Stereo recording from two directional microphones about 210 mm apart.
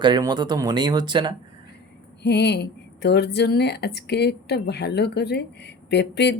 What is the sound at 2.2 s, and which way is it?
Speech, 55° left (ahead or behind).